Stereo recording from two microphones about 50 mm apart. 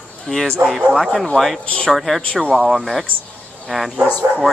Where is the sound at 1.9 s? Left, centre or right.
Centre.